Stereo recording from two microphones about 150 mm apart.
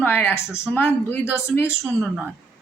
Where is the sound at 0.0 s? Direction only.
10° left (ahead or behind).